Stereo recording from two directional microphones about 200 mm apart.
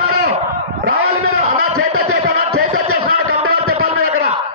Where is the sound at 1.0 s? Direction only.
90° right.